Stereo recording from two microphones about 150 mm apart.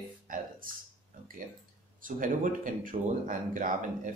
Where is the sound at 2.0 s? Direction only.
65° right (ahead or behind).